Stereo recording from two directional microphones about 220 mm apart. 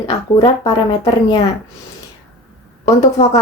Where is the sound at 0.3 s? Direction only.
25° left (ahead or behind).